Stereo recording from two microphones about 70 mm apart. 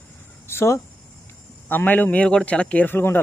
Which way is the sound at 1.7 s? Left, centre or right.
Left.